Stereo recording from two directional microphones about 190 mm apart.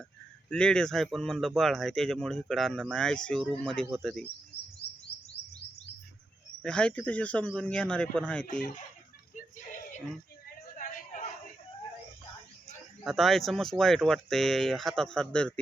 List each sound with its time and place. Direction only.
0.5 s speech: 5° left (ahead or behind)
5.4 s chirp: 60° left (ahead or behind)
6.6 s speech: 5° left (ahead or behind)
10.8 s a sound: 40° left (ahead or behind)
13.1 s speech: centre (ahead or behind)